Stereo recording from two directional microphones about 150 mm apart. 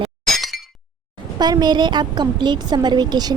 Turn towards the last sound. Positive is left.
turn(degrees=-25)  # may be behind; listen again after turning